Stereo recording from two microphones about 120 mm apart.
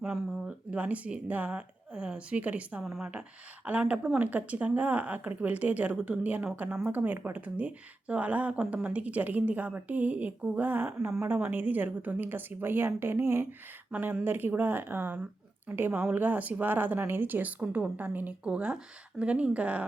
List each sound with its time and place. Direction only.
0.0 s a woman's voice: 10° right (ahead or behind)